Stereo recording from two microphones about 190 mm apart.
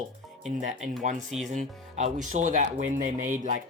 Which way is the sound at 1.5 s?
40° right (ahead or behind).